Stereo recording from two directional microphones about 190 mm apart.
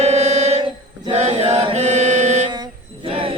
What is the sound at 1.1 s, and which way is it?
Chant, 35° right (ahead or behind).